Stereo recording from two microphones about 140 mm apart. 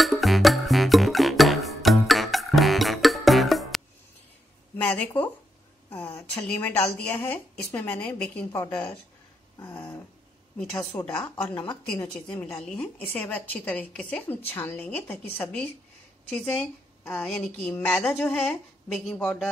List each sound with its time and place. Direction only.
0.0 s music: centre (ahead or behind)
4.8 s speech: 10° left (ahead or behind)
6.4 s a woman's voice: 10° left (ahead or behind)
11.5 s a woman's voice: 35° left (ahead or behind)
12.1 s a woman's voice: 5° left (ahead or behind)